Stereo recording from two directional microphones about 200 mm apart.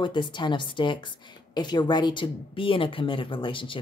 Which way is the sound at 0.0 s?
25° left (ahead or behind).